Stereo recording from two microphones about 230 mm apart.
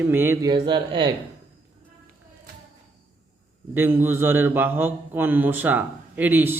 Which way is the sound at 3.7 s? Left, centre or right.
Centre.